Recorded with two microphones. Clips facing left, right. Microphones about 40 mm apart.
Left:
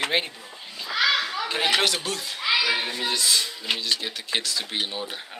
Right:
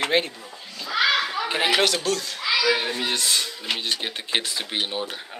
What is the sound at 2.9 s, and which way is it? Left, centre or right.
Speech, right.